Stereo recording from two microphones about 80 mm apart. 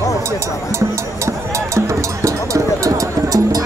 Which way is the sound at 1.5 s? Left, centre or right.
Right.